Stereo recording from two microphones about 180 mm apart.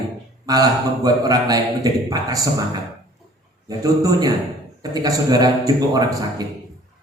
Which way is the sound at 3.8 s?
20° right (ahead or behind).